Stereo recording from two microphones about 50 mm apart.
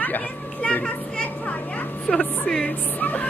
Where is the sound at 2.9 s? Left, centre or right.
Left.